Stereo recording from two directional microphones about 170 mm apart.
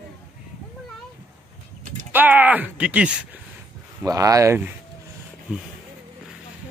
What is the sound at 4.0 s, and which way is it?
Speech, 20° right (ahead or behind).